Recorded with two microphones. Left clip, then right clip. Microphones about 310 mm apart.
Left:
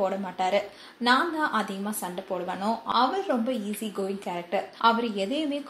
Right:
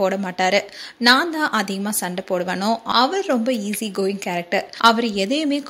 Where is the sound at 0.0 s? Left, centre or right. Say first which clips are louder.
Right 7 dB; right.